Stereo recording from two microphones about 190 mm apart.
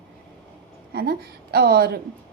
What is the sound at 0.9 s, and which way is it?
A woman's voice, 55° right (ahead or behind).